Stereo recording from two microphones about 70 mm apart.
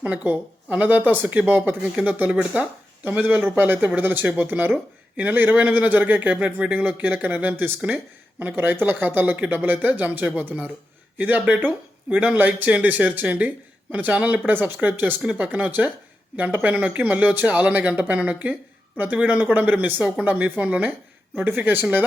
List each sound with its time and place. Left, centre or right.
0.0 s speech: centre